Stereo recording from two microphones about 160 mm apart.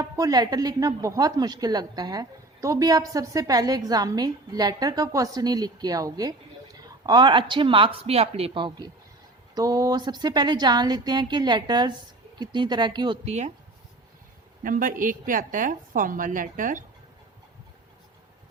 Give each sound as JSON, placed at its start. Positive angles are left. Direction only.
{"t": 0.0, "sound": "a woman's voice", "side_deg": -20}
{"t": 13.2, "sound": "speech", "side_deg": -45}
{"t": 14.6, "sound": "a woman's voice", "side_deg": -60}